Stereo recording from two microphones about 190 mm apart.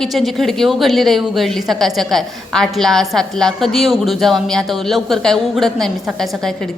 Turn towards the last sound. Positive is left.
turn(degrees=0)  # may be behind; listen again after turning